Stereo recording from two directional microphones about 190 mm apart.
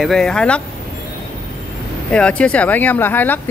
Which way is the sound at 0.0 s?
Centre (ahead or behind).